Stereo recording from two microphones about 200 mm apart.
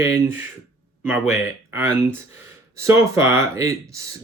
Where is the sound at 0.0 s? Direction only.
15° right (ahead or behind).